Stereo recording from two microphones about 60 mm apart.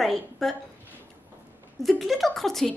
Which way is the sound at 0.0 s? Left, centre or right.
Centre.